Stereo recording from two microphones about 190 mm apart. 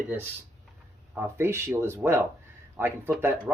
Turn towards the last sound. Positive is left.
turn(degrees=-10)  # may be behind; listen again after turning